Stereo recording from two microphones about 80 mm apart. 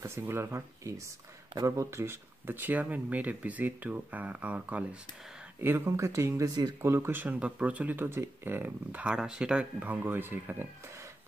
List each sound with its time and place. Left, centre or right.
0.0 s speech: right
5.6 s speech: right
5.9 s speech: right
6.8 s speech: right
9.0 s speech: centre
9.8 s speech: right